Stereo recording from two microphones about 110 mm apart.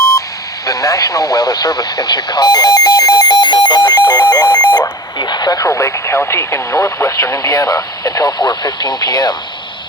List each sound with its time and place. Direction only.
0.6 s radio: 30° left (ahead or behind)
5.2 s speech: 40° left (ahead or behind)